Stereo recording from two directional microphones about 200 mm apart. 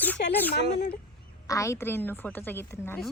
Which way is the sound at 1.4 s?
15° left (ahead or behind).